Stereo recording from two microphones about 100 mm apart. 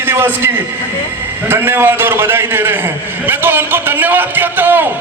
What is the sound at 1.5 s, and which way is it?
A man's voice, 20° right (ahead or behind).